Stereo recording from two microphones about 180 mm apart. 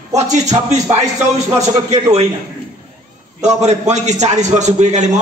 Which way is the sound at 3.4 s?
40° right (ahead or behind).